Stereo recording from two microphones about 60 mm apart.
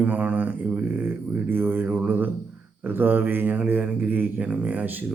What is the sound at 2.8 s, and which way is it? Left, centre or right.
Mantra, right.